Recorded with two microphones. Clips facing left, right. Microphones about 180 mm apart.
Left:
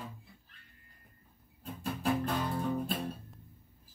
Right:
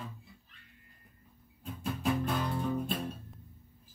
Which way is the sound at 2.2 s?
Centre (ahead or behind).